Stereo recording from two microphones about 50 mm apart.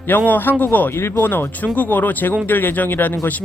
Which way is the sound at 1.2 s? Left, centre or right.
Left.